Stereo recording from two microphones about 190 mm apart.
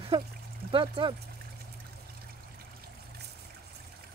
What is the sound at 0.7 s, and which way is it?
Speech, 25° right (ahead or behind).